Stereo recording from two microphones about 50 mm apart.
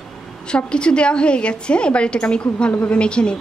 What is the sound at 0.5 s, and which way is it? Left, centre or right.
A woman's voice, centre.